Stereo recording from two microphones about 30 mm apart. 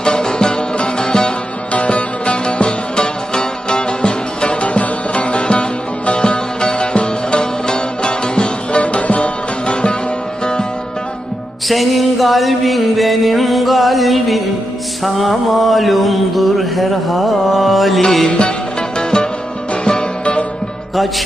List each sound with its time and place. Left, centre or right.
0.0 s music: left
1.7 s music: left
4.6 s music: left
6.1 s sitar: left
8.8 s music: left
10.4 s music: left
11.7 s music: centre
15.0 s mantra: centre
18.3 s music: left